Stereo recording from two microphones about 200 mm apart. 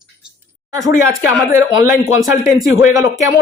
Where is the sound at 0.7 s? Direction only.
15° right (ahead or behind).